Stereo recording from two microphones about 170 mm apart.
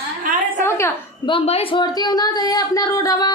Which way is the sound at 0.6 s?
15° left (ahead or behind).